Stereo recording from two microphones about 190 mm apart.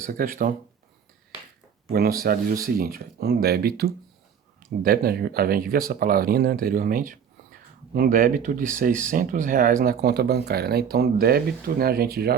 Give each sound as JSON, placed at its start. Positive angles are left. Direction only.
{"t": 0.0, "sound": "speech", "side_deg": -50}
{"t": 1.9, "sound": "speech", "side_deg": -55}